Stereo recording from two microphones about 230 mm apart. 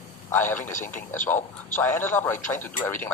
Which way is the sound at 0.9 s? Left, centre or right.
Left.